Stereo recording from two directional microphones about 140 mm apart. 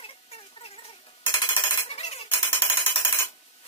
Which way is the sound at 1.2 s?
30° left (ahead or behind).